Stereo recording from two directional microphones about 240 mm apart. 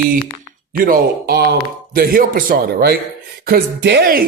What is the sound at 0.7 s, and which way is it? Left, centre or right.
A man's voice, right.